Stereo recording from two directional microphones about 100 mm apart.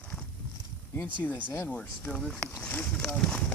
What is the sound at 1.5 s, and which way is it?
Speech, 20° left (ahead or behind).